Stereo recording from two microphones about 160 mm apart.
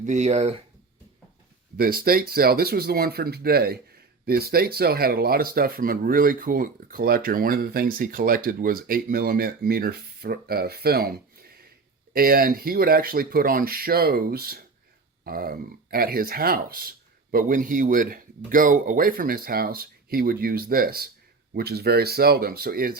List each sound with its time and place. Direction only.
0.0 s speech: 45° right (ahead or behind)
1.7 s speech: 70° right (ahead or behind)
17.3 s a man's voice: 55° right (ahead or behind)
21.5 s speech: 80° right